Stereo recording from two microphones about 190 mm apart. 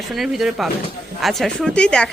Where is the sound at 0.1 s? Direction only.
Centre (ahead or behind).